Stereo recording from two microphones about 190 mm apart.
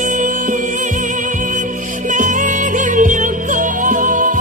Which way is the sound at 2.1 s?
40° right (ahead or behind).